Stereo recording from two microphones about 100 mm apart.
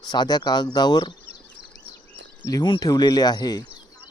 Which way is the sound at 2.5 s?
40° left (ahead or behind).